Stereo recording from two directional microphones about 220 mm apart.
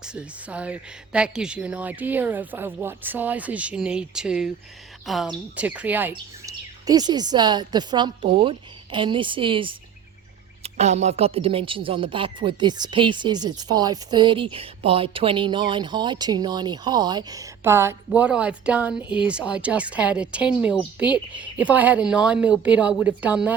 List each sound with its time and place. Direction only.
0.0 s a woman's voice: 5° right (ahead or behind)